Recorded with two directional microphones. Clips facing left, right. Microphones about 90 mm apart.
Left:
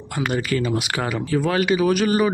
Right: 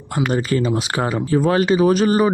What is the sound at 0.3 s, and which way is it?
Speech, 30° right (ahead or behind).